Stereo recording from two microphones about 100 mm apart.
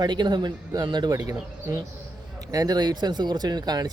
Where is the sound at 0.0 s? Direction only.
45° right (ahead or behind).